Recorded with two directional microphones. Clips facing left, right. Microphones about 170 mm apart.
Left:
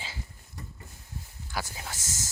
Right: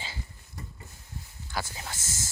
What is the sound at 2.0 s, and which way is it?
Speech, 10° right (ahead or behind).